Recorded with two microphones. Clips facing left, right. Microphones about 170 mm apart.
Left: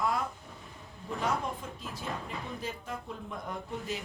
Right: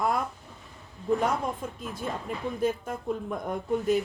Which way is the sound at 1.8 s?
50° right (ahead or behind).